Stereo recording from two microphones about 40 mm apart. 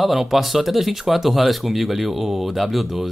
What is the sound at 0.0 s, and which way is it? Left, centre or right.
Speech, centre.